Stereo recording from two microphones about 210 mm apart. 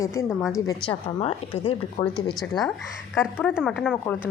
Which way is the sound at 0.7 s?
25° left (ahead or behind).